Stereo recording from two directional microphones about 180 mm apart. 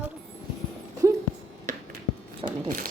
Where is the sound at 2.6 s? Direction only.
50° right (ahead or behind).